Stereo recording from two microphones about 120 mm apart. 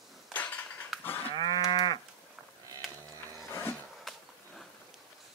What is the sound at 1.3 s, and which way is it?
Cattle, 35° left (ahead or behind).